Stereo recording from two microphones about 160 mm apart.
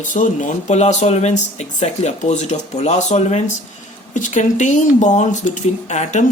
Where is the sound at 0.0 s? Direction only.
55° left (ahead or behind).